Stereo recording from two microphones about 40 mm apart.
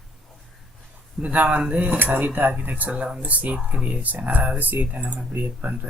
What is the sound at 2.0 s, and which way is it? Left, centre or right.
Mantra, right.